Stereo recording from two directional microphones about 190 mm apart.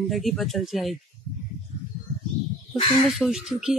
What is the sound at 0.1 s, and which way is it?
Speech, centre (ahead or behind).